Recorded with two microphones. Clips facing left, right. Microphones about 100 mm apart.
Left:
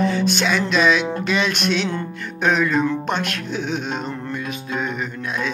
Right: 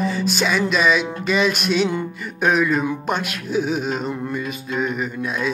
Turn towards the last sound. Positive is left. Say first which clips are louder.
# right 2 dB
turn(degrees=-5)  # may be behind; listen again after turning